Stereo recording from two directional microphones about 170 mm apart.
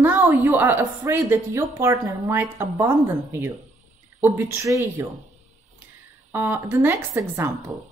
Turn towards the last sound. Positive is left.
turn(degrees=-15)  # may be behind; listen again after turning